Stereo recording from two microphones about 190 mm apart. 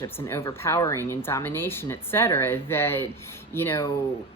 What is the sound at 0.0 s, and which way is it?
Speech, 15° left (ahead or behind).